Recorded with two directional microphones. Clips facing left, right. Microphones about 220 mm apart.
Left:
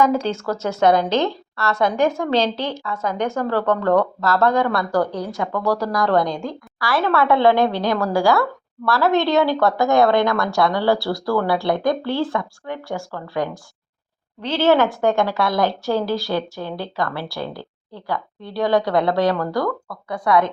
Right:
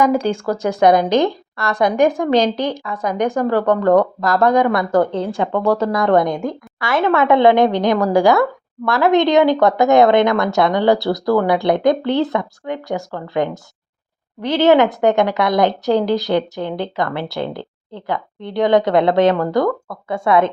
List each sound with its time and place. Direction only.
0.0 s a woman's voice: 15° right (ahead or behind)